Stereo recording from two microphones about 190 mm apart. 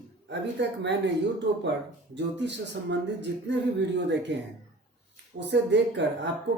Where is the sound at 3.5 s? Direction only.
70° right (ahead or behind).